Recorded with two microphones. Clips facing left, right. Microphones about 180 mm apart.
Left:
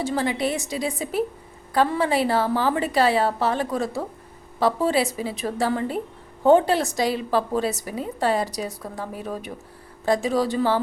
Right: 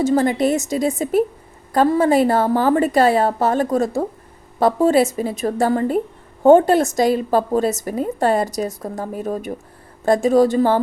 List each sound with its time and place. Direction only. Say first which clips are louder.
0.0 s a woman's voice: right 7 dB; 45° right (ahead or behind)